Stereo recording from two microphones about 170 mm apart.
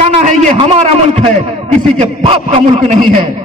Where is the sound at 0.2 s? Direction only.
45° right (ahead or behind).